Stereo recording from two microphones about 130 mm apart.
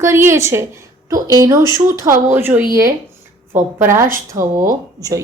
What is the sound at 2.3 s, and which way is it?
A woman's voice, 15° right (ahead or behind).